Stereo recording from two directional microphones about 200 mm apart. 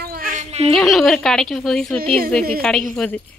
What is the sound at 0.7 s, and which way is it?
Speech, centre (ahead or behind).